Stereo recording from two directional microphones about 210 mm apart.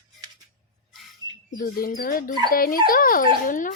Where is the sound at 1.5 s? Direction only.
40° left (ahead or behind).